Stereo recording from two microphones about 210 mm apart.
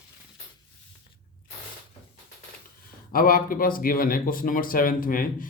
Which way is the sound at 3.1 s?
45° left (ahead or behind).